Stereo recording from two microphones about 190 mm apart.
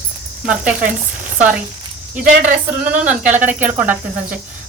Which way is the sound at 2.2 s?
45° right (ahead or behind).